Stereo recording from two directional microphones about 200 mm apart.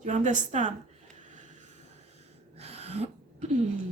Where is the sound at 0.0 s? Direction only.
35° right (ahead or behind).